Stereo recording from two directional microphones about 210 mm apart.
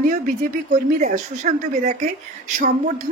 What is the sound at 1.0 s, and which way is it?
Speech, 35° right (ahead or behind).